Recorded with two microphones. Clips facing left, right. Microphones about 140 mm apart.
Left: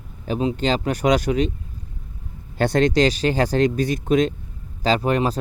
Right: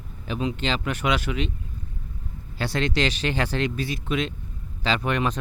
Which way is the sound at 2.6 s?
45° left (ahead or behind).